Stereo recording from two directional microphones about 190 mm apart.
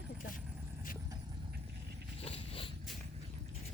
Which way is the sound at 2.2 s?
30° left (ahead or behind).